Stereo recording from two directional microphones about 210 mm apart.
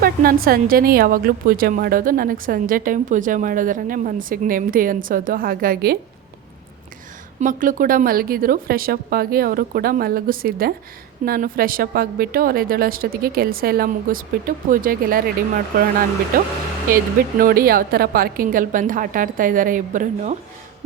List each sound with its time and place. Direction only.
0.0 s a woman's voice: 45° right (ahead or behind)
7.3 s a woman's voice: 40° right (ahead or behind)